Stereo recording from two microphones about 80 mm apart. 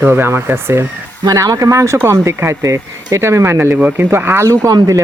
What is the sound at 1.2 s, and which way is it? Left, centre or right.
Speech, right.